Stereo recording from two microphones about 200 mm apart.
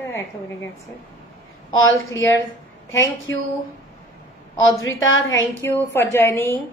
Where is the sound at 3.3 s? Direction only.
75° left (ahead or behind).